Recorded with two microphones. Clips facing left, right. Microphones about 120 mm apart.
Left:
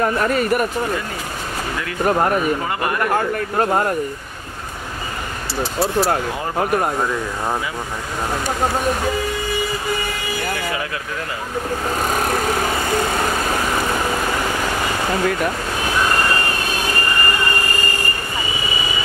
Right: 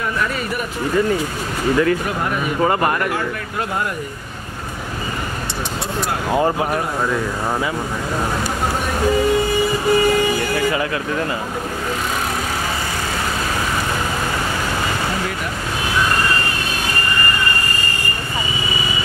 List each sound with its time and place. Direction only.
0.0 s speech: 45° left (ahead or behind)
2.0 s speech: 45° left (ahead or behind)